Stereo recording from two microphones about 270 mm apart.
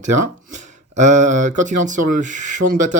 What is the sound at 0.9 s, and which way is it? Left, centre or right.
Speech, right.